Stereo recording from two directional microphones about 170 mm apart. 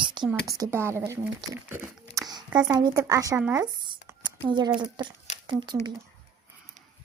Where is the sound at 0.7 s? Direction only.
15° right (ahead or behind).